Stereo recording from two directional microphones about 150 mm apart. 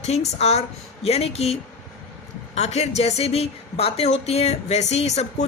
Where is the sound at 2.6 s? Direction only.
45° left (ahead or behind).